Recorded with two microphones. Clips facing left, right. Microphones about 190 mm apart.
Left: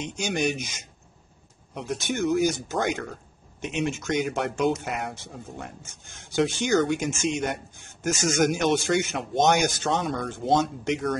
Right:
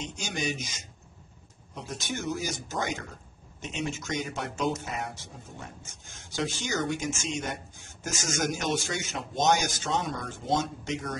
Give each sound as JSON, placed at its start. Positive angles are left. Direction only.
{"t": 0.0, "sound": "speech", "side_deg": 60}